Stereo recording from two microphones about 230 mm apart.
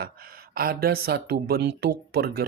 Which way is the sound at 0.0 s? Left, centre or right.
Right.